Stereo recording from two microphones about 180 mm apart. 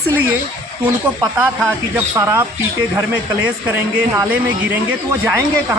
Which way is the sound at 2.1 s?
15° right (ahead or behind).